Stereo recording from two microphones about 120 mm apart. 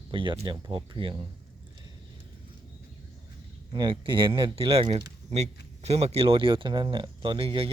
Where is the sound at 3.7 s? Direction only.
40° right (ahead or behind).